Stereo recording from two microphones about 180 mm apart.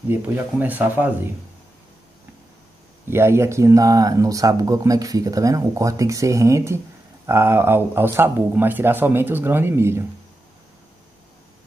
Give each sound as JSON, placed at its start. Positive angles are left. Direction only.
{"t": 0.1, "sound": "speech", "side_deg": -10}
{"t": 3.1, "sound": "speech", "side_deg": -15}